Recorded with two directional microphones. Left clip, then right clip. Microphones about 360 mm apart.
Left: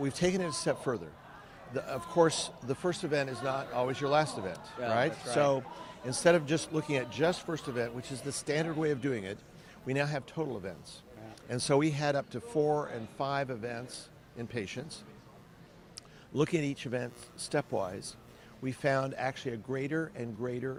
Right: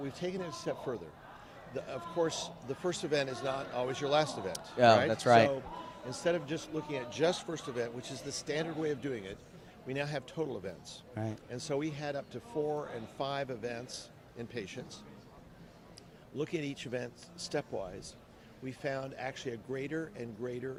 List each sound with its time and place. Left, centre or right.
0.0 s a man's voice: left; by 4.5 s centre
4.8 s speech: right
6.1 s speech: left
7.1 s a man's voice: centre
11.4 s a man's voice: left
16.3 s speech: left